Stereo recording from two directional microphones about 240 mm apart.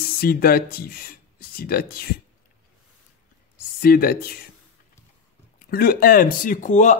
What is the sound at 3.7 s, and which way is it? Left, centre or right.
Speech, left.